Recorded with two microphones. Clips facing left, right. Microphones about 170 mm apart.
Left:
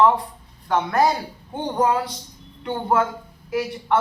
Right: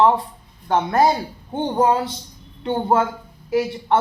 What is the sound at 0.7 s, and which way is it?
A woman's voice, 25° right (ahead or behind).